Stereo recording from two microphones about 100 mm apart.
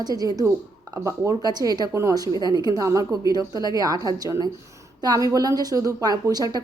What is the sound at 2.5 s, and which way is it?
A woman's voice, 40° right (ahead or behind).